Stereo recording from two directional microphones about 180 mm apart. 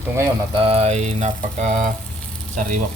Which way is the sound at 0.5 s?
35° right (ahead or behind).